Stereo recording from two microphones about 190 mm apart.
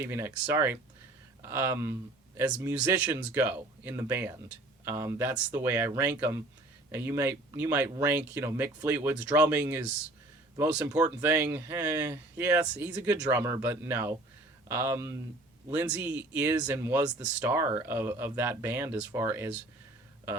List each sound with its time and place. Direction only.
0.0 s speech: 10° right (ahead or behind)